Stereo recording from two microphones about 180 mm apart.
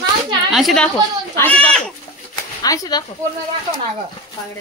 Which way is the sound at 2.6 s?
20° left (ahead or behind).